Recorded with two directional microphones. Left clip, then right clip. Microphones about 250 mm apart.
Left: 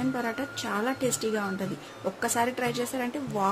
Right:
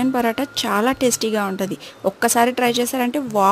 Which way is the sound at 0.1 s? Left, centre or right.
Right.